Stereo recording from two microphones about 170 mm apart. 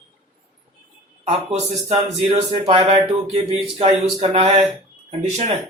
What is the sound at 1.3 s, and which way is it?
Speech, 40° right (ahead or behind).